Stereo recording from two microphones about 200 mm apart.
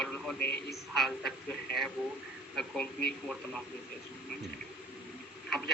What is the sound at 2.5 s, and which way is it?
Speech, 5° left (ahead or behind).